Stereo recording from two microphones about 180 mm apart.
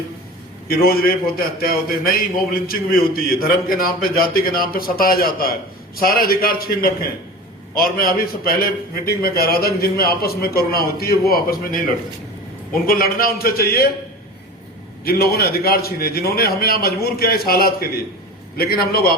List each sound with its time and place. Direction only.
0.7 s a man's voice: 55° left (ahead or behind)
12.8 s a man's voice: 55° left (ahead or behind)
15.0 s a man's voice: 55° left (ahead or behind)